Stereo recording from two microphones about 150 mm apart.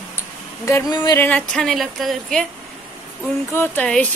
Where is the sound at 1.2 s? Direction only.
10° left (ahead or behind).